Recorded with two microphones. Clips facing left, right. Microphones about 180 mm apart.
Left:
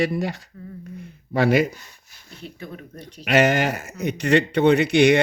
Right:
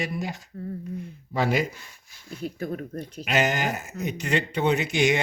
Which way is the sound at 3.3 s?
70° left (ahead or behind).